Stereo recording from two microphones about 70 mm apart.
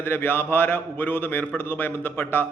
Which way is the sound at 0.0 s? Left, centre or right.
Left.